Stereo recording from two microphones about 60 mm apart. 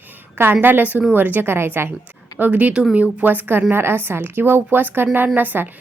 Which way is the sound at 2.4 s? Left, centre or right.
Right.